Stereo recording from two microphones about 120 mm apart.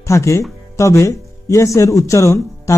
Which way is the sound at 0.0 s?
25° left (ahead or behind).